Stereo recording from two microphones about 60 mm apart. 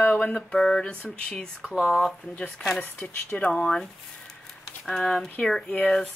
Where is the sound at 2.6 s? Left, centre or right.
Left.